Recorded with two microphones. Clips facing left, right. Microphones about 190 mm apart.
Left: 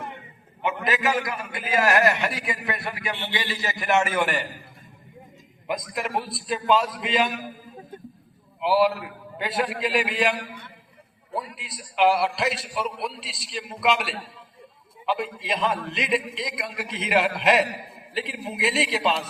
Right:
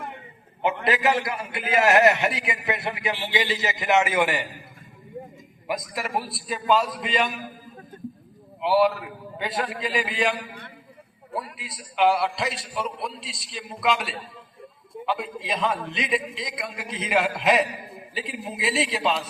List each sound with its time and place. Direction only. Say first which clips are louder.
0.6 s a man's voice: right 2 dB; 30° right (ahead or behind)
5.9 s a man's voice: left 1 dB; centre (ahead or behind)
8.6 s a man's voice: even; centre (ahead or behind)
11.5 s a man's voice: left 1 dB; centre (ahead or behind)